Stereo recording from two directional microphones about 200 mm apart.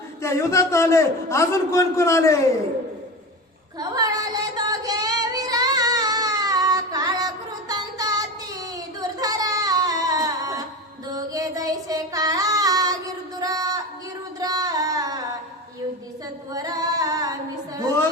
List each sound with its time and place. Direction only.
0.2 s a man's voice: 15° left (ahead or behind)
3.8 s child singing: 20° right (ahead or behind)
7.7 s music: 20° right (ahead or behind)
11.1 s child singing: 20° right (ahead or behind)
13.4 s a sound: 20° right (ahead or behind)
14.3 s singing: 20° right (ahead or behind)
16.5 s female singing: 20° right (ahead or behind)